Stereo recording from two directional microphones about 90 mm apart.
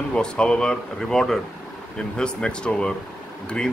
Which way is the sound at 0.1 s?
10° left (ahead or behind).